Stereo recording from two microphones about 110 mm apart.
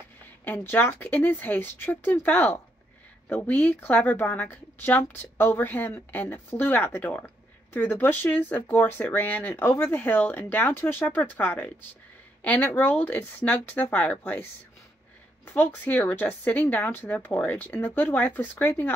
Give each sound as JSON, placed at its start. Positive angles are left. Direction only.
{"t": 0.5, "sound": "speech", "side_deg": 20}